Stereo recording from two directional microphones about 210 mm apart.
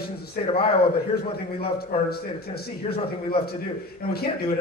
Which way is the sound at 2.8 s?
25° left (ahead or behind).